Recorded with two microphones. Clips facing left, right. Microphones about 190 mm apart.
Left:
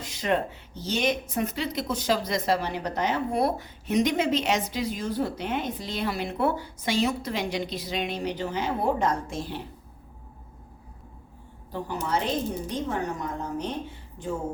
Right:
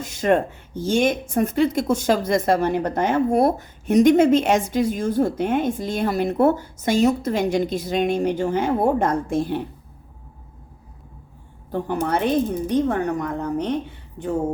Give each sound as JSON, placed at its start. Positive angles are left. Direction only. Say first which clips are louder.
{"t": 0.0, "sound": "speech", "louder": "right 7 dB", "side_deg": -50}
{"t": 11.7, "sound": "speech", "louder": "right 6 dB", "side_deg": -55}